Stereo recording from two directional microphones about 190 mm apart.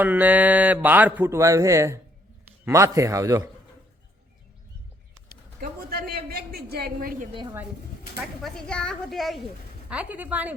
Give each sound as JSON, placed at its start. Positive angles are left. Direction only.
{"t": 0.0, "sound": "speech", "side_deg": -10}
{"t": 5.5, "sound": "a sound", "side_deg": -55}
{"t": 8.4, "sound": "a woman's voice", "side_deg": 5}